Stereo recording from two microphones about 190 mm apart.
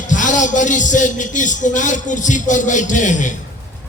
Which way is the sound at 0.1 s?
40° left (ahead or behind).